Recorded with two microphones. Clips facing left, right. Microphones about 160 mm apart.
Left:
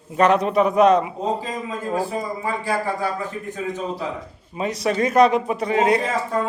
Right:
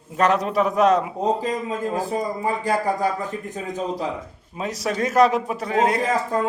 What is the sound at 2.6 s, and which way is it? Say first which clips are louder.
Speech: right 2 dB; 45° right (ahead or behind).